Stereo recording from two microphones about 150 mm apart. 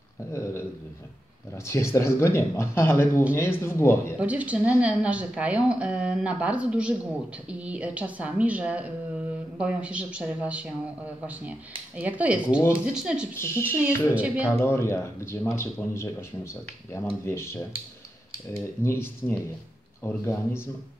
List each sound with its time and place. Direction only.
0.3 s speech: 20° left (ahead or behind)
1.7 s speech: 20° left (ahead or behind)
4.2 s speech: 10° right (ahead or behind)
12.0 s speech: 10° right (ahead or behind)
13.3 s speech: 15° left (ahead or behind)
14.1 s speech: 10° right (ahead or behind)
14.6 s speech: 15° left (ahead or behind)